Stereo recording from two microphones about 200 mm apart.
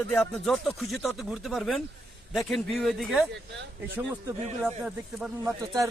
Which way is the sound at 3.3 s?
60° right (ahead or behind).